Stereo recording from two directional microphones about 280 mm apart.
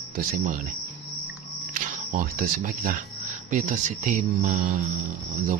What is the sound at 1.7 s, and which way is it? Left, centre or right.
Speech, right.